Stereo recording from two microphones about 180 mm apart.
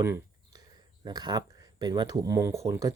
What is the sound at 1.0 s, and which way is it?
Speech, 25° right (ahead or behind).